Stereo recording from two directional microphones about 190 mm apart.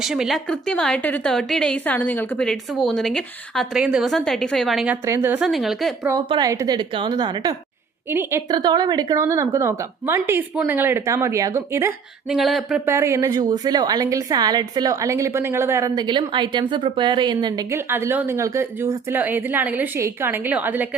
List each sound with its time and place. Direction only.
0.0 s a woman's voice: 5° right (ahead or behind)
5.0 s a woman's voice: 15° right (ahead or behind)
6.1 s a woman's voice: 20° right (ahead or behind)
12.3 s a woman's voice: centre (ahead or behind)
12.8 s a woman's voice: 15° right (ahead or behind)